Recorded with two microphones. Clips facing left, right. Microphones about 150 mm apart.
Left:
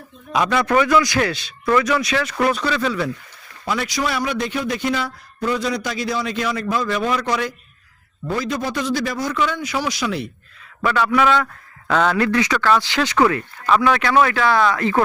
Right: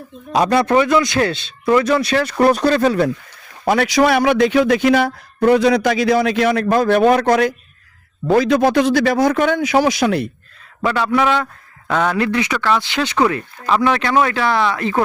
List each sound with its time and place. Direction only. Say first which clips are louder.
0.3 s speech: right 4 dB; 35° right (ahead or behind)
3.7 s a man's voice: right 9 dB; 65° right (ahead or behind)
10.8 s speech: right 1 dB; 25° right (ahead or behind)
11.9 s speech: even; 10° right (ahead or behind)